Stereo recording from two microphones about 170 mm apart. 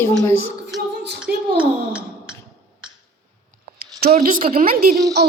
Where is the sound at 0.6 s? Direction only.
75° right (ahead or behind).